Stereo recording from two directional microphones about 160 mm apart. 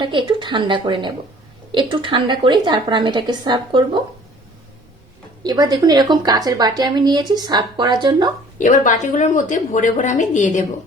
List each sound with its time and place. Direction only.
0.0 s a woman's voice: 30° right (ahead or behind)
5.4 s a woman's voice: 25° right (ahead or behind)
8.5 s a woman's voice: 55° left (ahead or behind)